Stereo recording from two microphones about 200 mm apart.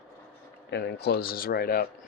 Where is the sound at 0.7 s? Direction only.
55° left (ahead or behind).